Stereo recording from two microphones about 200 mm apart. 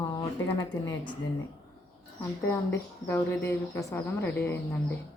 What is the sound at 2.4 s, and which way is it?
Speech, 10° left (ahead or behind).